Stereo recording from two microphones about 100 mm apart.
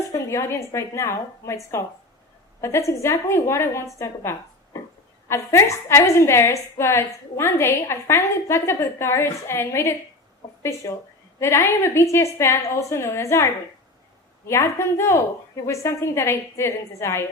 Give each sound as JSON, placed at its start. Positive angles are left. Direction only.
{"t": 0.1, "sound": "a woman's voice", "side_deg": 30}